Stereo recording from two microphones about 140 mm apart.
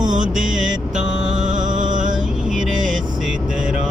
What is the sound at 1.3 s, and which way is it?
Music, 65° right (ahead or behind).